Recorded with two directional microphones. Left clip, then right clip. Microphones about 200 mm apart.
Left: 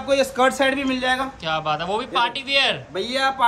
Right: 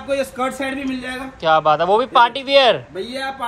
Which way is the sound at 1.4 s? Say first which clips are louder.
Right 9 dB; centre (ahead or behind).